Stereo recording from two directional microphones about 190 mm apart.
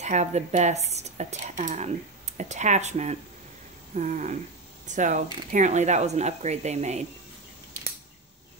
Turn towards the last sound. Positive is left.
turn(degrees=-35)  # may be behind; listen again after turning